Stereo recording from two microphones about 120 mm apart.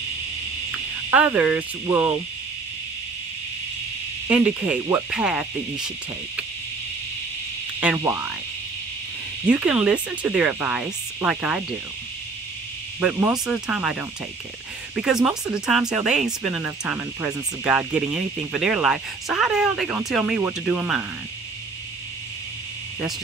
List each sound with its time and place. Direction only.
0.7 s speech: 15° right (ahead or behind)
4.3 s speech: 15° right (ahead or behind)
7.8 s speech: 15° right (ahead or behind)
9.5 s speech: 10° right (ahead or behind)
13.0 s speech: 20° right (ahead or behind)
13.3 s speech: 5° right (ahead or behind)
15.5 s speech: 5° right (ahead or behind)